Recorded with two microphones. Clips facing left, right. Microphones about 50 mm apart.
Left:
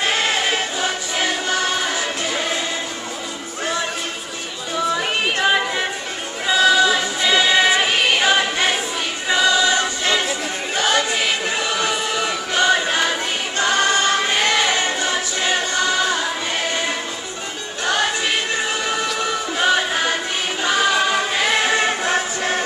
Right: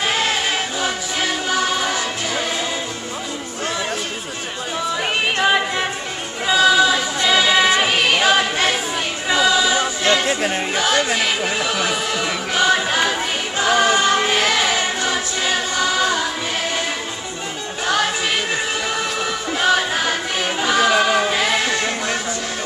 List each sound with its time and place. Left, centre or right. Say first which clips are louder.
0.0 s choir: even; centre
5.2 s music: right 2 dB; centre
6.4 s choir: right 1 dB; centre
17.8 s music: even; centre
20.6 s choir: right 2 dB; centre
21.7 s music: left 3 dB; left